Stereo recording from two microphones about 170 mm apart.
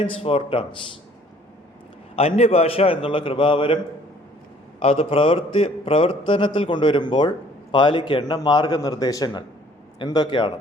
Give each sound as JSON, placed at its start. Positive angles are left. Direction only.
{"t": 0.0, "sound": "a man's voice", "side_deg": 35}
{"t": 2.1, "sound": "a man's voice", "side_deg": 35}
{"t": 4.8, "sound": "a man's voice", "side_deg": 35}